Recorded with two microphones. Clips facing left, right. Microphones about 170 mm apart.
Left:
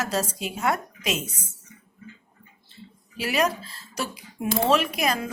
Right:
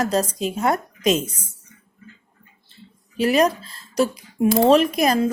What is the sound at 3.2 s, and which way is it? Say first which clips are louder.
A woman's voice: right 7 dB; 35° right (ahead or behind).